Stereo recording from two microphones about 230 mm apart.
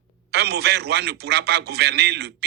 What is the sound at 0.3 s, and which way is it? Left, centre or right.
Speech, right.